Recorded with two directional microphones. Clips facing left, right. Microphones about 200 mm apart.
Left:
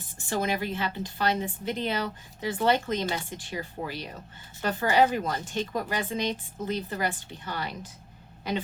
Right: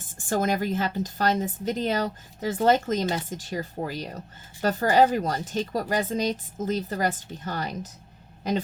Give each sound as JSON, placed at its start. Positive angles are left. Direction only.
{"t": 0.0, "sound": "a woman's voice", "side_deg": -45}